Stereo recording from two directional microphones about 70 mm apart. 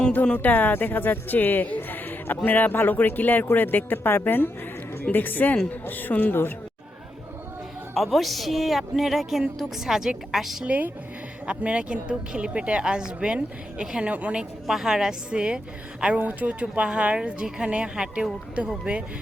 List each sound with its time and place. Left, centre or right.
0.3 s a woman's voice: left
7.9 s a woman's voice: centre
10.7 s a woman's voice: right
14.7 s a woman's voice: centre